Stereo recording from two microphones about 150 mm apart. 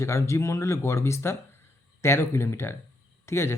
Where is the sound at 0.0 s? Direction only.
20° left (ahead or behind).